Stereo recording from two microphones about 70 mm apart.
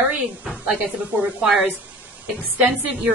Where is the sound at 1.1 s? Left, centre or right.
Centre.